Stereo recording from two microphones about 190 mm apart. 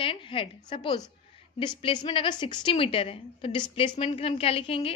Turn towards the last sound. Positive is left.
turn(degrees=30)  # may be behind; listen again after turning